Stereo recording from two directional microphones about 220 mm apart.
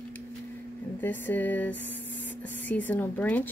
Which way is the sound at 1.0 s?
10° left (ahead or behind).